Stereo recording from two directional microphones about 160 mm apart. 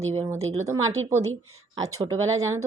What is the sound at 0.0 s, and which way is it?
Speech, 40° right (ahead or behind).